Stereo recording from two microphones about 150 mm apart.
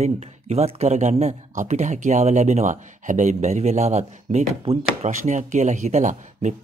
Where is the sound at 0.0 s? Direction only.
45° right (ahead or behind).